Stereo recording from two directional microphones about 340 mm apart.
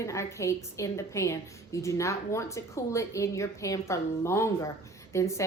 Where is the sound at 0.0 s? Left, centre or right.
Centre.